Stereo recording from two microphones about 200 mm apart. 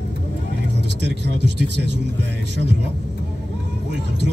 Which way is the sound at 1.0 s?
60° right (ahead or behind).